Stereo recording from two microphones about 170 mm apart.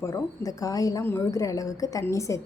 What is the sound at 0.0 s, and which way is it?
A woman's voice, 20° left (ahead or behind).